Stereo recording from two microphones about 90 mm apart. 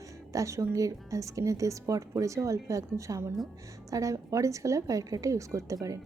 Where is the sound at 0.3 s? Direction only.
35° right (ahead or behind).